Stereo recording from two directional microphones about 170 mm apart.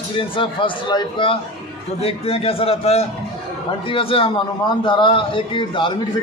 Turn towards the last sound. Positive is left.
turn(degrees=30)  # may be behind; listen again after turning